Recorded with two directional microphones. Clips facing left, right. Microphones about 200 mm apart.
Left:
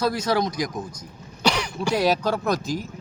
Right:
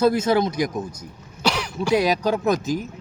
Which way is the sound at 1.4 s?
5° right (ahead or behind).